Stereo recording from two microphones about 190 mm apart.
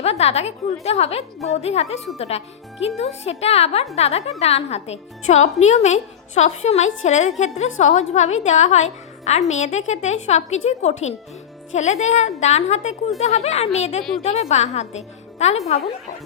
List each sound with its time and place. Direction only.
0.0 s a woman's voice: 35° left (ahead or behind)